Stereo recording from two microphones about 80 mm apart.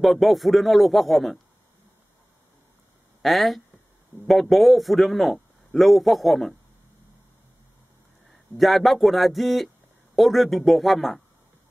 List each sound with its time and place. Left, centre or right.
0.0 s a man's voice: centre
3.2 s a man's voice: centre
8.5 s a man's voice: centre